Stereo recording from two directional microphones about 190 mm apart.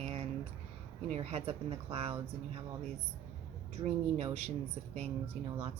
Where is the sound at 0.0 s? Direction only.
30° right (ahead or behind).